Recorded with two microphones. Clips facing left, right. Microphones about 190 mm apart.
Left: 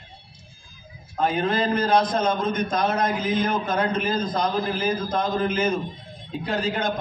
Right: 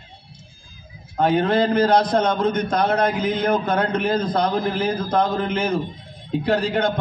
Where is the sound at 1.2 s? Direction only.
70° right (ahead or behind).